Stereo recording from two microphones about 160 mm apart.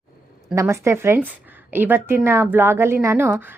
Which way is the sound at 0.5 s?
15° right (ahead or behind).